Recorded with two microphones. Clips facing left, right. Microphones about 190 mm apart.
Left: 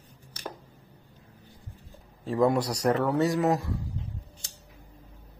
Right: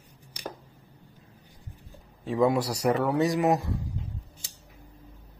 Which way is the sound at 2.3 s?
Centre (ahead or behind).